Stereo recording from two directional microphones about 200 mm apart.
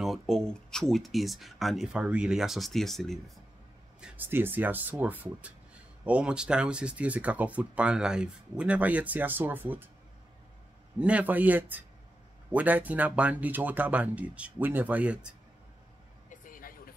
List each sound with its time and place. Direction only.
0.0 s speech: centre (ahead or behind)
4.0 s speech: 10° right (ahead or behind)
11.0 s speech: 5° right (ahead or behind)
16.3 s vehicle: 45° left (ahead or behind)